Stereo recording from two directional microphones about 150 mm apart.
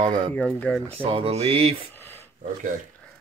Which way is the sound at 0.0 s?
30° right (ahead or behind).